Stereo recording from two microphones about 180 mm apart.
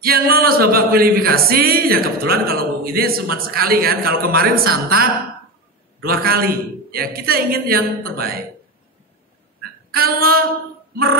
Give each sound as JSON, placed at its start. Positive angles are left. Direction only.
{"t": 0.0, "sound": "music", "side_deg": -55}
{"t": 9.9, "sound": "music", "side_deg": -55}